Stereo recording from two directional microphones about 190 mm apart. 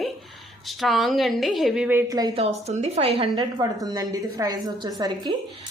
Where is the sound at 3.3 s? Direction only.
20° right (ahead or behind).